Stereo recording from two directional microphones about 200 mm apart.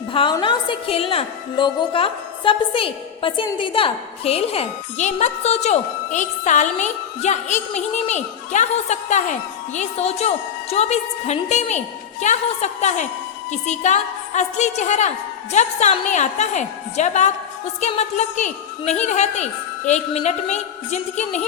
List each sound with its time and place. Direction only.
0.1 s a woman's voice: 25° left (ahead or behind)